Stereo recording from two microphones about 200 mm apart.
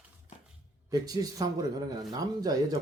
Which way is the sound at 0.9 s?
20° right (ahead or behind).